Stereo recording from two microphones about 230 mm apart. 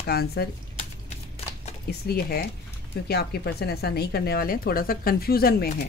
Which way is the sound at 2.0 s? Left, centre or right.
Left.